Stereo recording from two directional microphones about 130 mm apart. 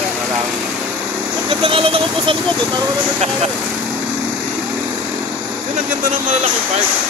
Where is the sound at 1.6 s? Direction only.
45° right (ahead or behind).